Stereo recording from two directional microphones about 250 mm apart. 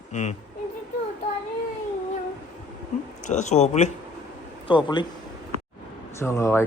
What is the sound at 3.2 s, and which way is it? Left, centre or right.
Speech, left.